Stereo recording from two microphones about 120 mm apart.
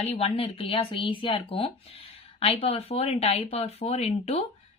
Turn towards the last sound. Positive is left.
turn(degrees=65)  # may be behind; listen again after turning